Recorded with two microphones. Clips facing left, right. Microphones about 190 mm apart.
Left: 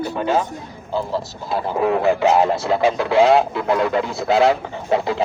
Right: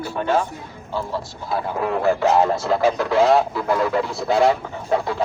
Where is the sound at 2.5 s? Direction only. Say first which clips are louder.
Left 1 dB; centre (ahead or behind).